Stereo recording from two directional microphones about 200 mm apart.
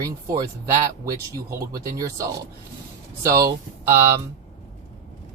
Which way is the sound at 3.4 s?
15° right (ahead or behind).